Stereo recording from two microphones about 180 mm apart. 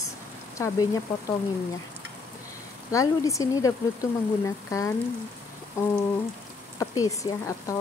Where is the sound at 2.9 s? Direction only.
20° left (ahead or behind).